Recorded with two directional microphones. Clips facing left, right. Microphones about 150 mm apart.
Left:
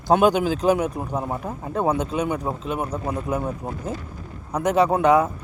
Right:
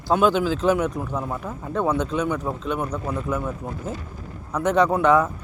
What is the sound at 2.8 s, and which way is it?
Speech, 30° left (ahead or behind).